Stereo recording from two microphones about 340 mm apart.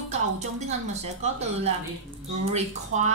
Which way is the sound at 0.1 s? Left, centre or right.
Centre.